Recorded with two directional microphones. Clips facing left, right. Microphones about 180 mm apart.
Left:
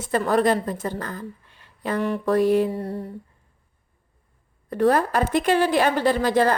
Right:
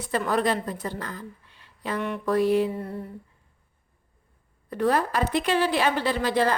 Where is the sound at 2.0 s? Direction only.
35° left (ahead or behind).